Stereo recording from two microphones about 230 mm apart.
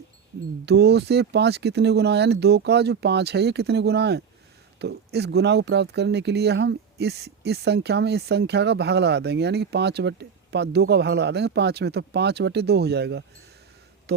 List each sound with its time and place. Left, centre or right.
0.6 s speech: right